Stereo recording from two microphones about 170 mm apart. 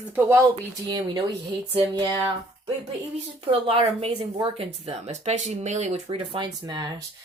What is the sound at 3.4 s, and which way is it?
A woman's voice, 35° right (ahead or behind).